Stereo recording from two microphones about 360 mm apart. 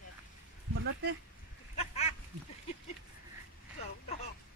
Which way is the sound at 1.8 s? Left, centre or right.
Centre.